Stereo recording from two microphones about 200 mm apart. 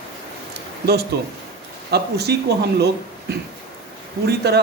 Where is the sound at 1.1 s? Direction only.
55° right (ahead or behind).